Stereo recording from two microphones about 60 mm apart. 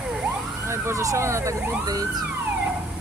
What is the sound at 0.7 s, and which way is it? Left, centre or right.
Speech, right.